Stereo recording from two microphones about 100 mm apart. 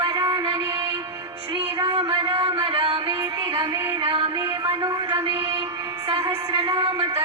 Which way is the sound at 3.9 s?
65° right (ahead or behind).